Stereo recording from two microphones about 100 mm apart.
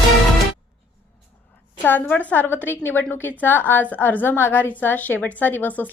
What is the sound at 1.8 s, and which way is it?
A woman's voice, 15° left (ahead or behind).